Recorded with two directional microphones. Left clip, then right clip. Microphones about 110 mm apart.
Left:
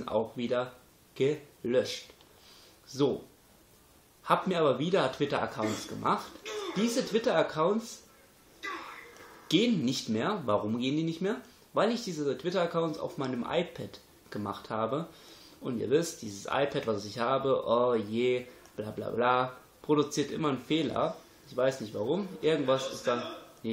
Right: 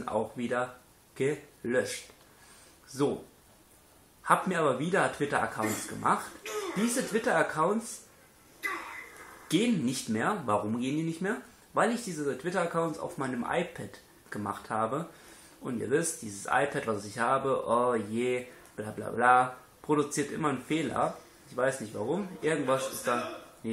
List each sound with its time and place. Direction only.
0.0 s speech: centre (ahead or behind)
4.3 s speech: centre (ahead or behind)
9.5 s a man's voice: centre (ahead or behind)